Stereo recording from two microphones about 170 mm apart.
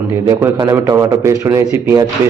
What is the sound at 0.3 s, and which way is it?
A man's voice, 20° right (ahead or behind).